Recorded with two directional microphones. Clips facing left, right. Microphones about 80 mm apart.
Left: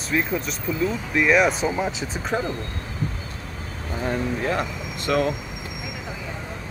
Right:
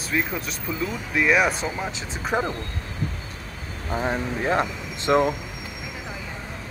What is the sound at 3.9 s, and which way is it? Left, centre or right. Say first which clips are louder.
Speech: even; right.